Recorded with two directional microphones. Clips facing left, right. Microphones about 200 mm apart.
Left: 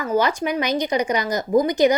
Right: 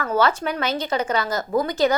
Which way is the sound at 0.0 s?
15° left (ahead or behind).